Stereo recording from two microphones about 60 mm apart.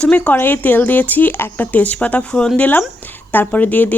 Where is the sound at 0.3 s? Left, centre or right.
Left; by 2.5 s centre.